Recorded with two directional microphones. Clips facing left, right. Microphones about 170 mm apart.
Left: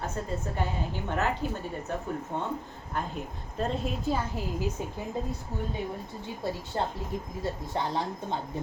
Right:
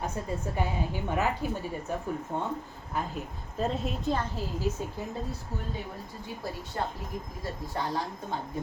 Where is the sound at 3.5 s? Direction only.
Centre (ahead or behind).